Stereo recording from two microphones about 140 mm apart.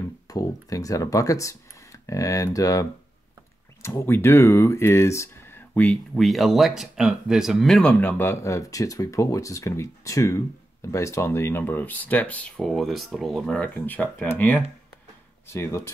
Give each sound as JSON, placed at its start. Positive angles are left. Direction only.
{"t": 0.3, "sound": "speech", "side_deg": 25}